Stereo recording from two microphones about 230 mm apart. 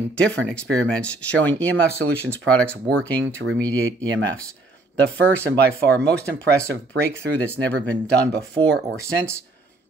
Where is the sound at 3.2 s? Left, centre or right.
Right.